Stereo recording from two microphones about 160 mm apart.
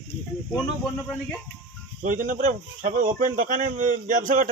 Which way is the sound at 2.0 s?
55° right (ahead or behind).